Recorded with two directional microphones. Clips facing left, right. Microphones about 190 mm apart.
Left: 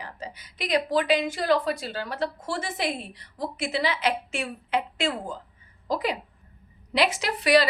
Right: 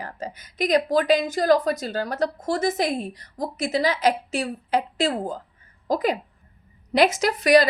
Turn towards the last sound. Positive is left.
turn(degrees=-45)  # may be behind; listen again after turning